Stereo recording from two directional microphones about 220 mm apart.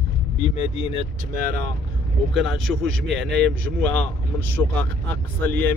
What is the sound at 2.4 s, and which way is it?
A man's voice, centre (ahead or behind).